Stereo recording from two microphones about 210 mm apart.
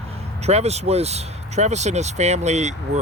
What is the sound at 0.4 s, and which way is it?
Speech, 30° right (ahead or behind).